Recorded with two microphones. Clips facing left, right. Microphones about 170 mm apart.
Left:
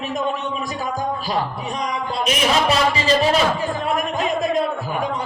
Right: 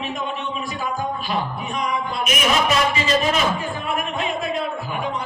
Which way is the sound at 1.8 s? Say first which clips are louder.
Left 2 dB; 30° left (ahead or behind).